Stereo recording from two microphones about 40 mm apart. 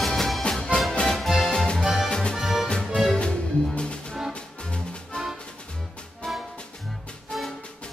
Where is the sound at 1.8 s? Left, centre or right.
Centre.